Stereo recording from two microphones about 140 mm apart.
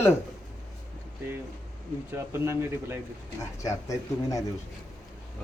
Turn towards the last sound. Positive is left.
turn(degrees=25)  # may be behind; listen again after turning